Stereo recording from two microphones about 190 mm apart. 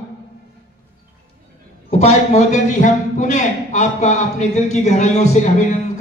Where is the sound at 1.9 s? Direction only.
35° left (ahead or behind).